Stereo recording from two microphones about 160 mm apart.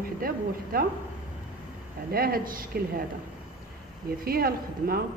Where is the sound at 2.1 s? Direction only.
70° right (ahead or behind).